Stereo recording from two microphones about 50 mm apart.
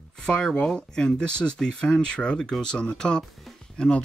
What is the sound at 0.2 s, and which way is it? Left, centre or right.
Speech, centre.